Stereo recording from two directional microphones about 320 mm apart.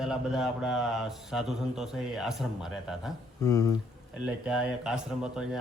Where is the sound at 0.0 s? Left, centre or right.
Centre.